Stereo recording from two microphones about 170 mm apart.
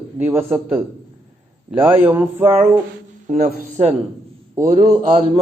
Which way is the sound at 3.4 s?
65° right (ahead or behind).